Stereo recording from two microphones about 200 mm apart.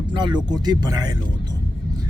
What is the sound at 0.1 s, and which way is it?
Speech, 20° right (ahead or behind).